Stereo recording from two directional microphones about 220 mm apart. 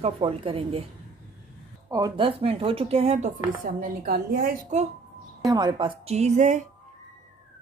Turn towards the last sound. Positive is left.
turn(degrees=-35)  # may be behind; listen again after turning